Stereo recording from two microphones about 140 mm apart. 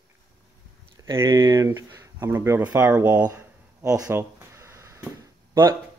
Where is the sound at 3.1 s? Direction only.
25° right (ahead or behind).